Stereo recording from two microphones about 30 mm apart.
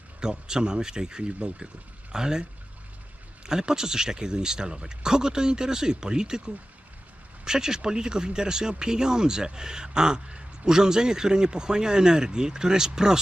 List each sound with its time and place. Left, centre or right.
0.2 s speech: right
1.4 s speech: right
2.1 s speech: right